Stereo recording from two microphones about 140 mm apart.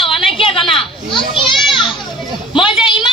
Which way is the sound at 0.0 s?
40° left (ahead or behind).